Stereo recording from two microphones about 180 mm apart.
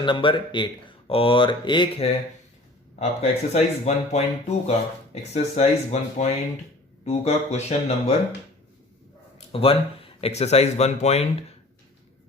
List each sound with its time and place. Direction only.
0.0 s speech: 25° left (ahead or behind)
9.5 s speech: 30° left (ahead or behind)